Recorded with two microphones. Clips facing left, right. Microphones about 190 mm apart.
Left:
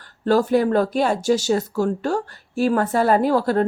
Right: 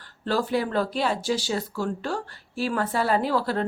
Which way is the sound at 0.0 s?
45° left (ahead or behind).